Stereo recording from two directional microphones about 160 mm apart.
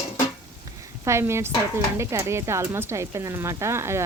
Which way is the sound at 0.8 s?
15° right (ahead or behind).